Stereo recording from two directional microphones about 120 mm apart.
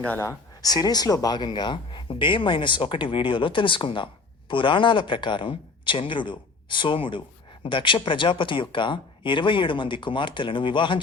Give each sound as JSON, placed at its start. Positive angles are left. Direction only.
{"t": 0.0, "sound": "speech", "side_deg": 20}